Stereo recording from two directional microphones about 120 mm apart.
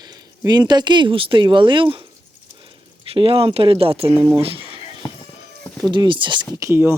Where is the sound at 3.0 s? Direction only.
50° right (ahead or behind).